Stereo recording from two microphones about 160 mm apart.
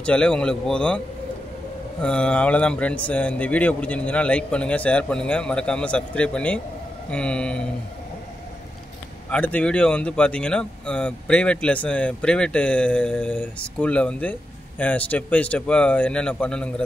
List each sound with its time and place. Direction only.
0.0 s speech: 5° left (ahead or behind)
9.3 s speech: 10° left (ahead or behind)